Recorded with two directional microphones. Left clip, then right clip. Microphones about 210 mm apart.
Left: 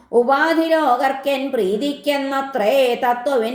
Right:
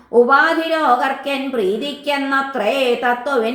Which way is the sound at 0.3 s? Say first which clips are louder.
Right 2 dB; 35° left (ahead or behind).